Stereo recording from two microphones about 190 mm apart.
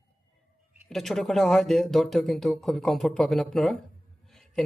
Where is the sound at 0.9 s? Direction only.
Centre (ahead or behind).